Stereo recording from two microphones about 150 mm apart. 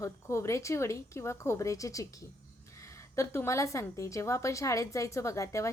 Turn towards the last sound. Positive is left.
turn(degrees=20)  # may be behind; listen again after turning